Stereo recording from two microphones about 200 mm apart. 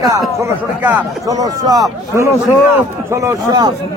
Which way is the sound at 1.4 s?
20° right (ahead or behind).